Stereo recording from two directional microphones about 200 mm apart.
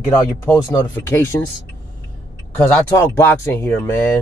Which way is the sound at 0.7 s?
10° left (ahead or behind).